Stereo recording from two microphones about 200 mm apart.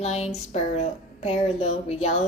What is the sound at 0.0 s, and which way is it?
Speech, 30° left (ahead or behind).